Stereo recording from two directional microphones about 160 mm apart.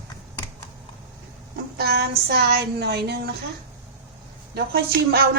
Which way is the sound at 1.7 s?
90° right.